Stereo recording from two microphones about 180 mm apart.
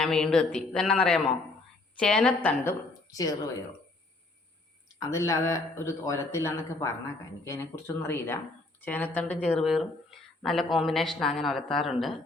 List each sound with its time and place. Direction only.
0.0 s a man's voice: 5° left (ahead or behind); by 3.3 s 20° left (ahead or behind)
4.9 s a man's voice: 20° left (ahead or behind); by 12.1 s centre (ahead or behind)